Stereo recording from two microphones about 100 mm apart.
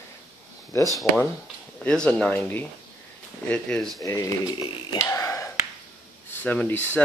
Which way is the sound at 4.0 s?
25° left (ahead or behind).